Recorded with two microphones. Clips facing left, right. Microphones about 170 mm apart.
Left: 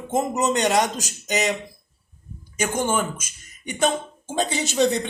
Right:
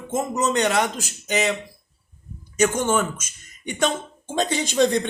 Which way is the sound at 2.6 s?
10° left (ahead or behind).